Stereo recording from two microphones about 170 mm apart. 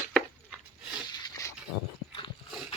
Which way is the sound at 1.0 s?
25° left (ahead or behind).